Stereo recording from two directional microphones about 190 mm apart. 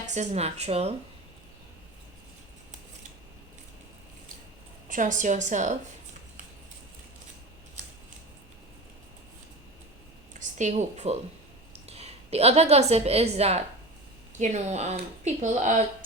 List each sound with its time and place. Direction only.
0.1 s speech: 35° right (ahead or behind)
4.9 s speech: 40° right (ahead or behind)
10.3 s a woman's voice: 40° right (ahead or behind)